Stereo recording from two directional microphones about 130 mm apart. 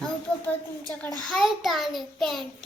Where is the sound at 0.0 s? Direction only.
10° left (ahead or behind).